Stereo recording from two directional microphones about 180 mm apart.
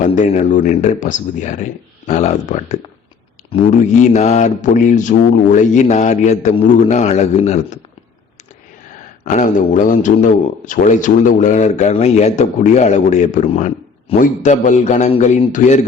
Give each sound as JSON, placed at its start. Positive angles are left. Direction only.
{"t": 0.0, "sound": "a man's voice", "side_deg": 45}
{"t": 9.2, "sound": "a man's voice", "side_deg": 45}